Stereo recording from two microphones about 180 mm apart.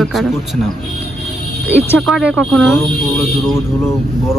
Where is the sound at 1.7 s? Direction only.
10° left (ahead or behind).